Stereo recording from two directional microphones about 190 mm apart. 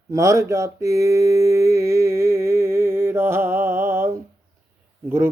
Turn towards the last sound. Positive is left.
turn(degrees=-10)  # may be behind; listen again after turning